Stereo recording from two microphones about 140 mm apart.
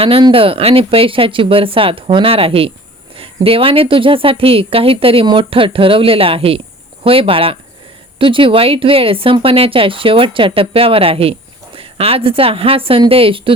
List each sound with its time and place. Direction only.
0.0 s speech: 40° right (ahead or behind)